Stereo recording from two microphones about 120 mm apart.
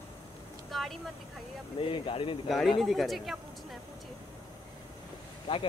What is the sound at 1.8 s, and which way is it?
Speech, 45° left (ahead or behind).